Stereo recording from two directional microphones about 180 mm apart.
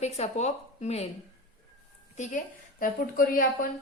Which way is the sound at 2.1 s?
45° left (ahead or behind).